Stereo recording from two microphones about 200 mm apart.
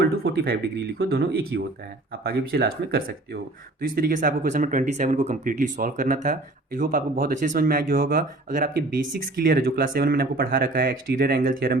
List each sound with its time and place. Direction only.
0.0 s speech: 50° right (ahead or behind)